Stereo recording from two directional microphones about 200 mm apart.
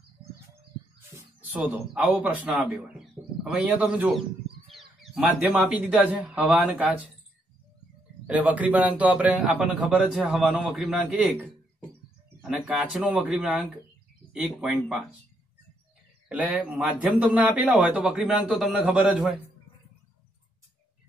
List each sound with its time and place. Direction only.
2.0 s a man's voice: 5° right (ahead or behind)
8.3 s a man's voice: 5° right (ahead or behind)
16.3 s a man's voice: 5° right (ahead or behind)